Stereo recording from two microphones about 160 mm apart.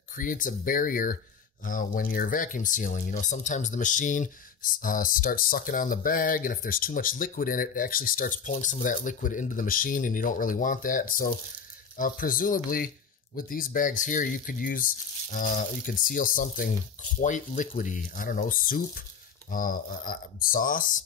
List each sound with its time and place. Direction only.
0.1 s speech: 55° left (ahead or behind)